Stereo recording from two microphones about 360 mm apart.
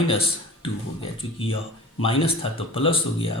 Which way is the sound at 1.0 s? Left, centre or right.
Centre.